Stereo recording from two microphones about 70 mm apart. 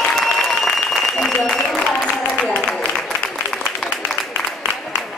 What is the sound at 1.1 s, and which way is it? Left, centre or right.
Applause, centre.